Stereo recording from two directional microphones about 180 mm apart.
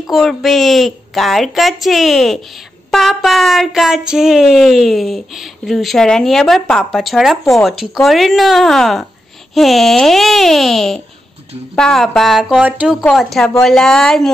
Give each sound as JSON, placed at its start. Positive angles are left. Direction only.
{"t": 0.0, "sound": "speech", "side_deg": 0}